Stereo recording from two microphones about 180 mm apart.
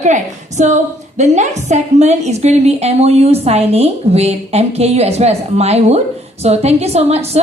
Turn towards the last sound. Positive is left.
turn(degrees=-35)  # may be behind; listen again after turning